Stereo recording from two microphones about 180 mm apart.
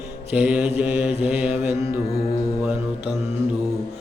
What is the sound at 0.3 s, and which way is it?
Mantra, 5° right (ahead or behind).